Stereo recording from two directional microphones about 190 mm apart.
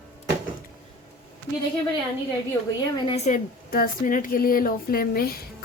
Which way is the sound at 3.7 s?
50° left (ahead or behind).